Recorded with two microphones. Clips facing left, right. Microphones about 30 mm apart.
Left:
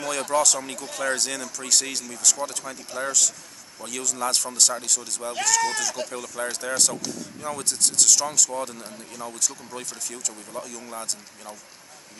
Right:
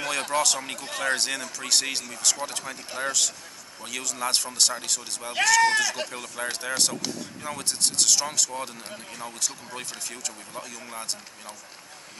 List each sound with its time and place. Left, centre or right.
0.0 s speech: right
8.8 s speech: right